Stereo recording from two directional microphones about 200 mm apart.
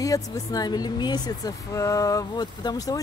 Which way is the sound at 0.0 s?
15° left (ahead or behind).